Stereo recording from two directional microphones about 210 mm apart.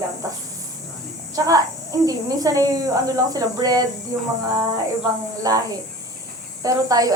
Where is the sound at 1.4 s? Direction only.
15° right (ahead or behind).